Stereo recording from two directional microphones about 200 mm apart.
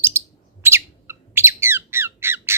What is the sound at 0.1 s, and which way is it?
Bird, 10° right (ahead or behind).